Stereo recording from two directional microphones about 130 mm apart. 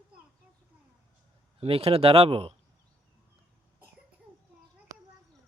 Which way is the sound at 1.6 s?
50° right (ahead or behind).